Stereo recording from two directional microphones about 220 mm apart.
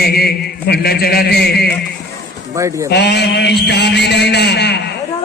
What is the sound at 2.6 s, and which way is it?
Speech, 15° right (ahead or behind).